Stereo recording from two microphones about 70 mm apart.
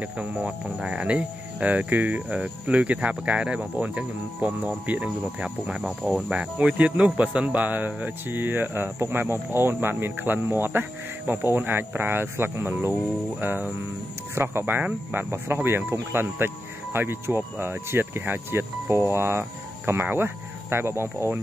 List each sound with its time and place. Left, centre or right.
0.0 s speech: right